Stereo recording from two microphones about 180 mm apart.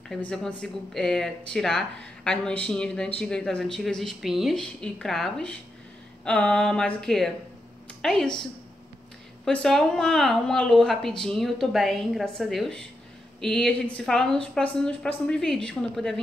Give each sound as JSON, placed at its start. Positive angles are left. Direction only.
{"t": 0.1, "sound": "a woman's voice", "side_deg": 5}